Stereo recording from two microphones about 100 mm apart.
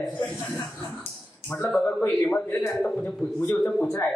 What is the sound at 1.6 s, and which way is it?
Speech, 5° left (ahead or behind).